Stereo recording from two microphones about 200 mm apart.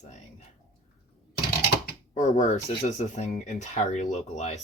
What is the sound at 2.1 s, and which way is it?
Speech, 35° left (ahead or behind).